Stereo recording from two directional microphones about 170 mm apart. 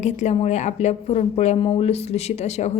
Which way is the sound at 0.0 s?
40° left (ahead or behind).